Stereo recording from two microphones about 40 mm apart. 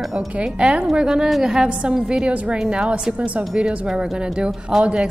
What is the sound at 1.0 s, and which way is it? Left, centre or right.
A woman's voice, centre.